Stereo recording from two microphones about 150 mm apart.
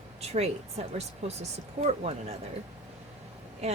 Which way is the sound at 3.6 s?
45° right (ahead or behind).